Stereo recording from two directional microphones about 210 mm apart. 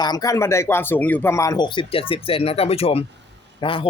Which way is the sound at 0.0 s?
20° left (ahead or behind).